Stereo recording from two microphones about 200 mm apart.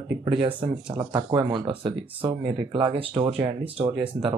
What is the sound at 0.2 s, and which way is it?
Speech, 25° right (ahead or behind).